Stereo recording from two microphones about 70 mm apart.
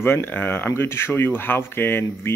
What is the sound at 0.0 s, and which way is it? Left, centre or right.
Speech, left.